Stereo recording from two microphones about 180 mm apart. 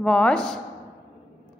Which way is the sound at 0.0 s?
5° left (ahead or behind).